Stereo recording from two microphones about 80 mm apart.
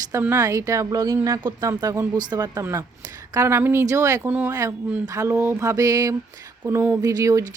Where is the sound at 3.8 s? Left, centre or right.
Right.